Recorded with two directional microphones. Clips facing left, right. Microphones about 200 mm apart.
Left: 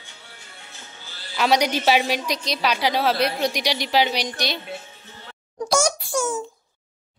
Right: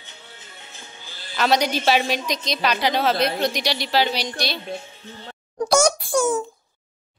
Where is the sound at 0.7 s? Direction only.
15° right (ahead or behind).